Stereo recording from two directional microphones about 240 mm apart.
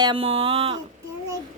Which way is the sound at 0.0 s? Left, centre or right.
Right.